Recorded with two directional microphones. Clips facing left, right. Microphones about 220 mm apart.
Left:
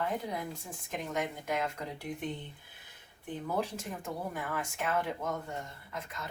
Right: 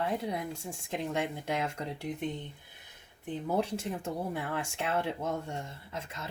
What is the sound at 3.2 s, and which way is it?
Speech, 25° right (ahead or behind).